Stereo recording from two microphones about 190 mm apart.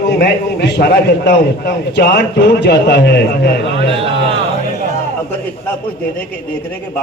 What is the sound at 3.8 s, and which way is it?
Speech, 30° right (ahead or behind).